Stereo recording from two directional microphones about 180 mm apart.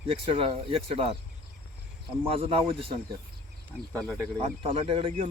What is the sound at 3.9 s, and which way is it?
Speech, 5° left (ahead or behind).